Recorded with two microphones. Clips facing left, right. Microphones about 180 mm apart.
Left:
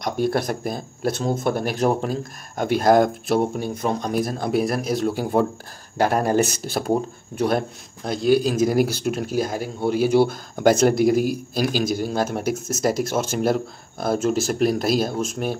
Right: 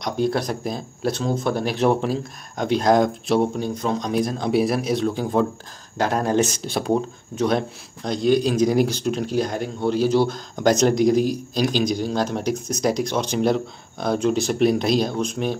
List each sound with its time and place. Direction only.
0.0 s speech: 55° left (ahead or behind)
0.7 s speech: centre (ahead or behind)
1.4 s speech: 50° left (ahead or behind)
1.9 s speech: 5° left (ahead or behind)